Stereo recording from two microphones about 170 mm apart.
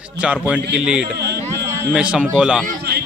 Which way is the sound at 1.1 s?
75° right (ahead or behind).